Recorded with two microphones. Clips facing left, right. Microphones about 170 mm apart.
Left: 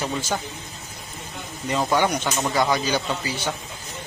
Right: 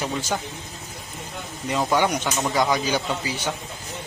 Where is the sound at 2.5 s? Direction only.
10° right (ahead or behind).